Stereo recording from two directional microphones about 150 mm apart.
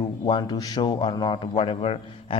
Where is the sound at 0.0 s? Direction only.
30° left (ahead or behind).